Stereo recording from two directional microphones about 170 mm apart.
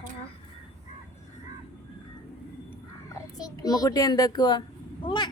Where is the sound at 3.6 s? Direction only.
25° left (ahead or behind).